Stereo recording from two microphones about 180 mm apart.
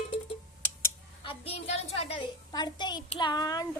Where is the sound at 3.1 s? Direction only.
25° left (ahead or behind).